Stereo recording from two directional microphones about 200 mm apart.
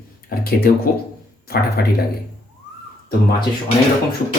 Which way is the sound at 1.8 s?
50° left (ahead or behind).